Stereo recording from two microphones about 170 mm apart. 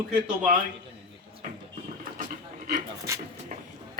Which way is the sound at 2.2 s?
45° right (ahead or behind).